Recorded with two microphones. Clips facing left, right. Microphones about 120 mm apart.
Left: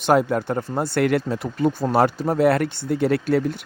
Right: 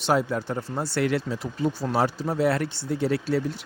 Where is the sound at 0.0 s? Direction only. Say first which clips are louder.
Left 5 dB; 55° left (ahead or behind).